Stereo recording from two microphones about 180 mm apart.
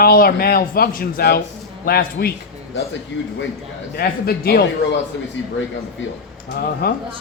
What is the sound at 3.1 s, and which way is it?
Speech, 80° left.